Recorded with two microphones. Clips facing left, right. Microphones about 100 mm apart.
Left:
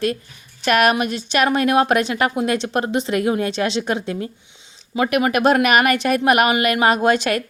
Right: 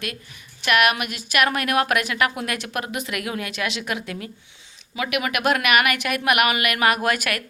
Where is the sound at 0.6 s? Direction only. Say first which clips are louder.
Left 4 dB; 35° left (ahead or behind).